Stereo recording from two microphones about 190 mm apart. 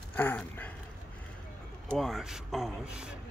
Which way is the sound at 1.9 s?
Centre (ahead or behind).